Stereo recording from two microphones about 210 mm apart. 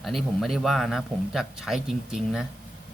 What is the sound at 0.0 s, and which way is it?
Speech, centre (ahead or behind).